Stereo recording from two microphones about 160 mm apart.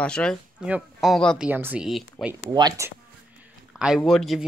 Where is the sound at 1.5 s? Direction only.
10° right (ahead or behind).